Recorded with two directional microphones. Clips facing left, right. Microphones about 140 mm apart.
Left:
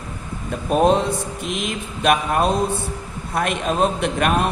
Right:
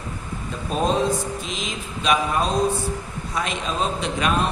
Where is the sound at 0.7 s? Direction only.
65° left (ahead or behind).